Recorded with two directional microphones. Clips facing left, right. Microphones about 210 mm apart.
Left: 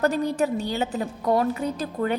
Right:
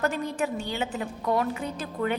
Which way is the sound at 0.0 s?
35° left (ahead or behind).